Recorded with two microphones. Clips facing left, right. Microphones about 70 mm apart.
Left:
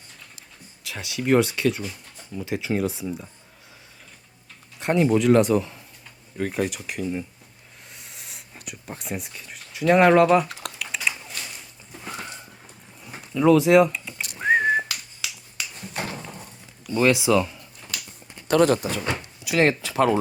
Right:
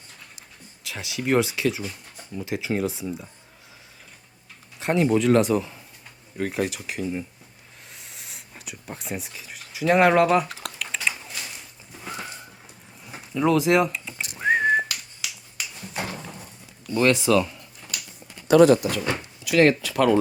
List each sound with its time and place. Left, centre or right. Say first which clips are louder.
0.9 s speech: left 3 dB; centre
4.8 s speech: left 1 dB; centre
7.9 s a sound: even; centre
13.3 s whistling: left 4 dB; centre
16.8 s speech: even; centre
18.7 s speech: right 3 dB; left